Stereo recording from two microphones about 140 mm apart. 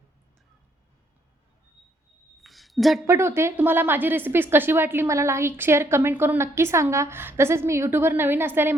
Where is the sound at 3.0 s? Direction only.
20° right (ahead or behind).